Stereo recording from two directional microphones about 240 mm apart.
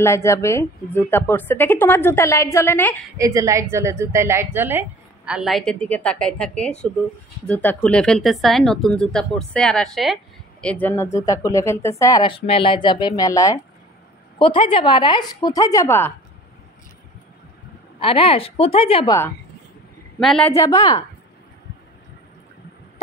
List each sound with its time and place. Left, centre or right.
0.0 s speech: centre
3.2 s a woman's voice: centre
18.0 s a woman's voice: left
20.2 s speech: centre